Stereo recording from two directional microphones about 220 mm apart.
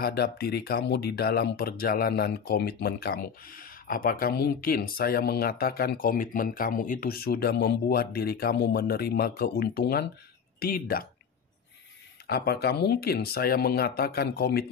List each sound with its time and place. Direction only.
0.0 s speech: 45° left (ahead or behind)
12.3 s speech: 45° left (ahead or behind)